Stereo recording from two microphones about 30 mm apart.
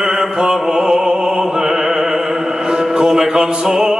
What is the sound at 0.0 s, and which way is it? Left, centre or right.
Opera, centre.